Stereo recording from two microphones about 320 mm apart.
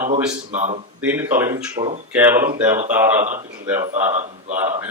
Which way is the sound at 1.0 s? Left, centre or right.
Centre.